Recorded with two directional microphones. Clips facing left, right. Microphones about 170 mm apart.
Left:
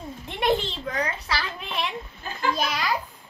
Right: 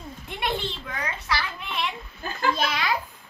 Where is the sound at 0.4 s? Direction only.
35° left (ahead or behind).